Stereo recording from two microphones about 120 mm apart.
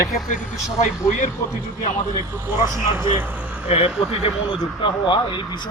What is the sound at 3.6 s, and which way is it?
A man's voice, 55° left (ahead or behind).